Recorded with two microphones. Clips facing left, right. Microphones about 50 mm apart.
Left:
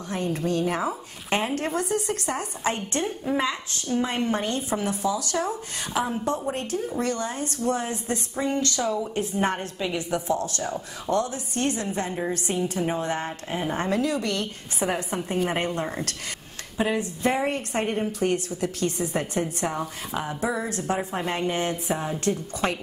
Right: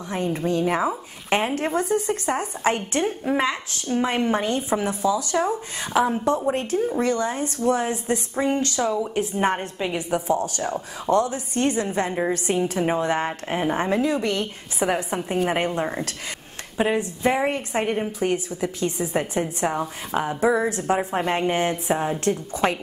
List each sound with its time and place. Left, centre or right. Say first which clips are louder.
0.1 s a woman's voice: right 2 dB; right
8.9 s a woman's voice: right 3 dB; centre; by 13.7 s right
13.7 s a woman's voice: right 3 dB; right